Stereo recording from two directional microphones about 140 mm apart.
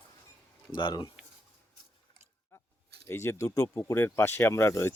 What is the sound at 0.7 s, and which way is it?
Speech, 30° left (ahead or behind).